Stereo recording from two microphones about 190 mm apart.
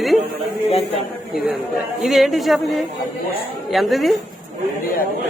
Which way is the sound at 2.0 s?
Centre (ahead or behind).